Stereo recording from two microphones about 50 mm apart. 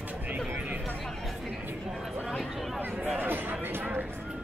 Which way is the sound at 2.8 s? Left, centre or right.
Right.